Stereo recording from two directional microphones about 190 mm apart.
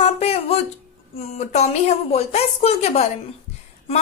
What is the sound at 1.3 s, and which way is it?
A woman's voice, 35° left (ahead or behind).